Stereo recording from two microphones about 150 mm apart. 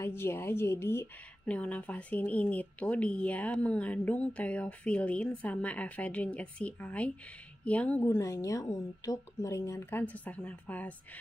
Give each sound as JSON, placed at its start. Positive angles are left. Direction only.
{"t": 0.0, "sound": "speech", "side_deg": 15}